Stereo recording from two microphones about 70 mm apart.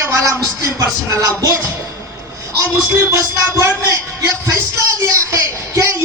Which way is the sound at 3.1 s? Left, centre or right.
Right.